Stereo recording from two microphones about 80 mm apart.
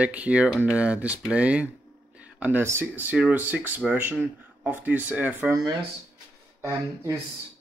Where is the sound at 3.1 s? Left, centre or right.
Centre.